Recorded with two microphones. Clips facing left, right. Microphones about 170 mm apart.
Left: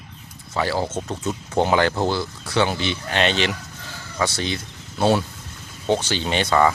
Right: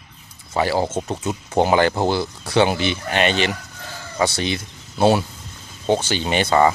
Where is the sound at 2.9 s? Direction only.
5° right (ahead or behind).